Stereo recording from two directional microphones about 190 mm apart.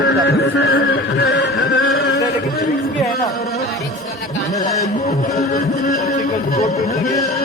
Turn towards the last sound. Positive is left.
turn(degrees=40)  # may be behind; listen again after turning